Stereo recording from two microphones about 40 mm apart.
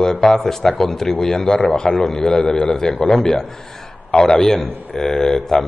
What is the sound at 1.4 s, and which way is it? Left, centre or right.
Speech, left.